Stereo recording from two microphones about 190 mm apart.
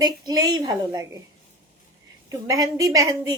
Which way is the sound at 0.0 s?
20° right (ahead or behind).